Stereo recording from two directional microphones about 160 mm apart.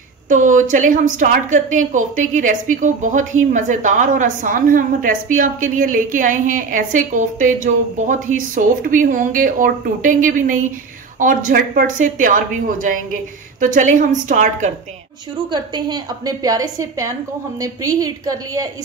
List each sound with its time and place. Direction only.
0.3 s a woman's voice: 50° right (ahead or behind)
15.5 s a woman's voice: 25° right (ahead or behind)